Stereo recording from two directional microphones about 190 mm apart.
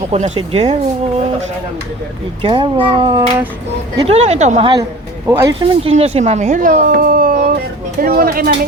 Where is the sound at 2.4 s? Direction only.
25° right (ahead or behind).